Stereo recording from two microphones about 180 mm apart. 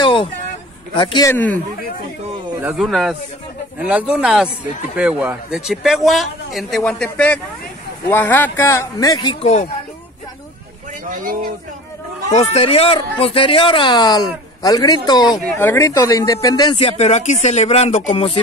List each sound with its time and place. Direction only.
0.0 s a sound: 30° left (ahead or behind)
0.9 s speech: 25° left (ahead or behind)
1.3 s speech: 10° left (ahead or behind)
2.6 s a man's voice: centre (ahead or behind); by 9.4 s 20° left (ahead or behind)
9.4 s speech: 40° left (ahead or behind)
11.1 s speech: 50° right (ahead or behind)
12.4 s speech: 35° left (ahead or behind)